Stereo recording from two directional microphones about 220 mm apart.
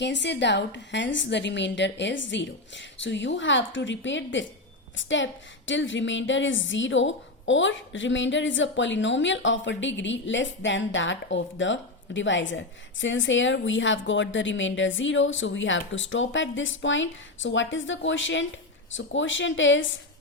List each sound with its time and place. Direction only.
0.0 s a woman's voice: 50° left (ahead or behind)